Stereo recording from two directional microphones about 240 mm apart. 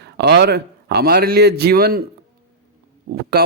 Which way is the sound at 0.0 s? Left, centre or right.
Right.